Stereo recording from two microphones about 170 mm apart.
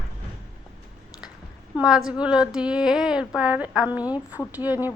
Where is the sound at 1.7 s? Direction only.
5° right (ahead or behind).